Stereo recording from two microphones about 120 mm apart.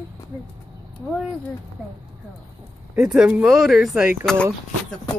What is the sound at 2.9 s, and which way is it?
Speech, 10° right (ahead or behind).